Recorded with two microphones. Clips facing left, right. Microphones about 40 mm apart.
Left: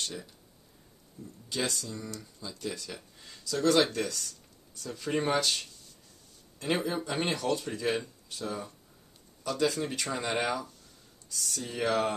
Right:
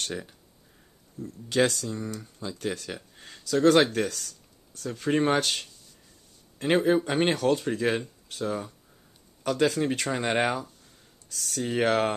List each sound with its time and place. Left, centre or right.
0.1 s speech: right
1.2 s speech: right
2.4 s speech: right
2.9 s a sound: right
3.4 s speech: right
11.2 s speech: right